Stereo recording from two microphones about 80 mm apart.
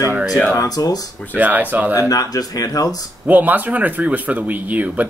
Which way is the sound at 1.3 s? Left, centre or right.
Right.